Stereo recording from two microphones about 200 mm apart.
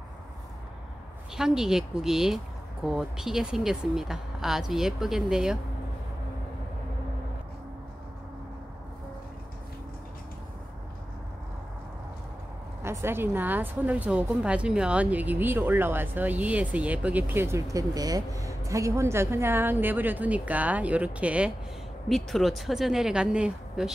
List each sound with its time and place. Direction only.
1.3 s speech: 5° right (ahead or behind)
12.8 s a woman's voice: 10° right (ahead or behind)